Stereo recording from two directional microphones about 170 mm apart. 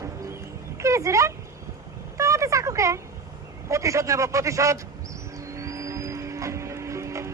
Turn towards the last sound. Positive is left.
turn(degrees=-15)  # may be behind; listen again after turning